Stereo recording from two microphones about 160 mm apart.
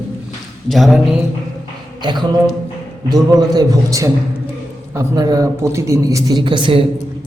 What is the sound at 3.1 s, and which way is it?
A man's voice, 25° right (ahead or behind).